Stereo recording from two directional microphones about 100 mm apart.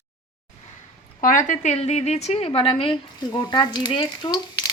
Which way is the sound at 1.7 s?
90° left.